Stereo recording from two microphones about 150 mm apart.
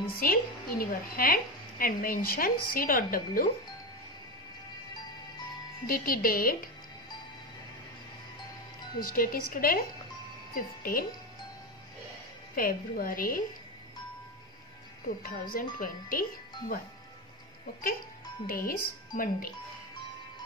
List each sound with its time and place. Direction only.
0.2 s a woman's voice: 75° left (ahead or behind)
5.9 s a woman's voice: 70° left (ahead or behind)
9.0 s a woman's voice: 70° left (ahead or behind)
12.5 s a woman's voice: 70° left (ahead or behind)
15.2 s a woman's voice: 75° left (ahead or behind)
18.5 s a woman's voice: 70° left (ahead or behind)